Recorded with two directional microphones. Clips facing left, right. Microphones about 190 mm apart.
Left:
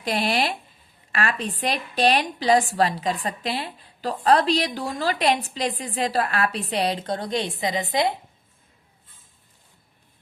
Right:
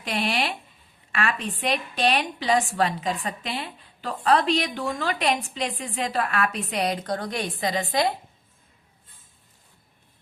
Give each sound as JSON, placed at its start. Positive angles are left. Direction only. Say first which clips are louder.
{"t": 0.0, "sound": "a woman's voice", "louder": "left 3 dB", "side_deg": 40}